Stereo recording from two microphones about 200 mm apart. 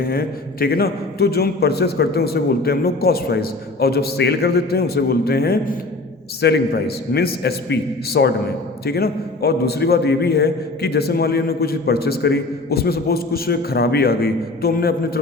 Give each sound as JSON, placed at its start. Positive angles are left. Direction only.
{"t": 0.0, "sound": "a man's voice", "side_deg": 50}